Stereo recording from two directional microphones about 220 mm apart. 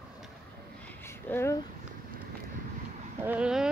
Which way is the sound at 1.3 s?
10° left (ahead or behind).